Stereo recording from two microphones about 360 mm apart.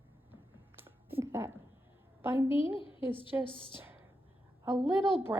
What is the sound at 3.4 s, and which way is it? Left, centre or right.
Speech, centre.